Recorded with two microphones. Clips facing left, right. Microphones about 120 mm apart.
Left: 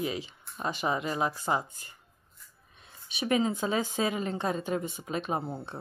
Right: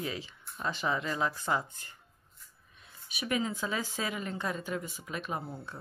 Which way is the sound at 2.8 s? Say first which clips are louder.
Left 5 dB; 25° left (ahead or behind).